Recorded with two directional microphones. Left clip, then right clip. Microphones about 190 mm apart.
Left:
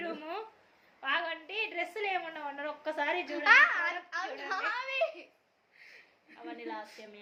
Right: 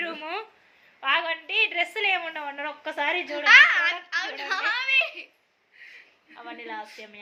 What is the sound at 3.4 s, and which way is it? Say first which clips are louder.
Speech: right 8 dB; 50° left (ahead or behind).